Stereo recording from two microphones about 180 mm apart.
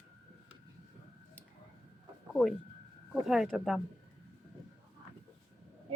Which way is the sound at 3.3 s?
Centre (ahead or behind).